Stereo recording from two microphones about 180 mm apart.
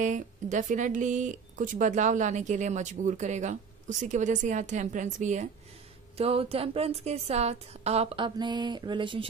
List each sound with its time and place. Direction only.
0.0 s a woman's voice: 45° right (ahead or behind); by 9.3 s 25° right (ahead or behind)